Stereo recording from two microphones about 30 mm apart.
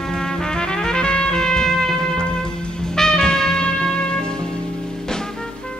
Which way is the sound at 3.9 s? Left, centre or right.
Left.